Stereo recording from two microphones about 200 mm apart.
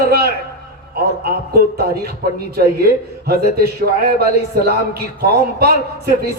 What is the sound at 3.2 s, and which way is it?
A man's voice, 50° right (ahead or behind).